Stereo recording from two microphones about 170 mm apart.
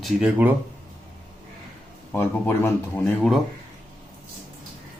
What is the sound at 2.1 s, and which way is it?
Speech, 10° left (ahead or behind).